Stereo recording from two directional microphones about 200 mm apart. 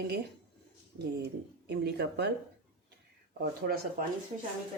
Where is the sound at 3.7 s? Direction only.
50° right (ahead or behind).